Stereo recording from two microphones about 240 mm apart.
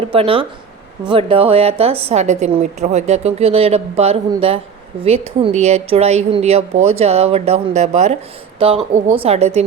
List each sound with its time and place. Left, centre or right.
0.1 s speech: right